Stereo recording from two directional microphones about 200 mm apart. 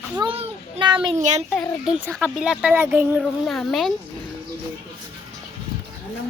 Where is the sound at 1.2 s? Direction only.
35° right (ahead or behind).